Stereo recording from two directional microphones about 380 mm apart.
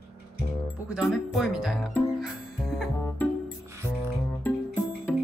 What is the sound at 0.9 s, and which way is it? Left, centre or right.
Music, centre.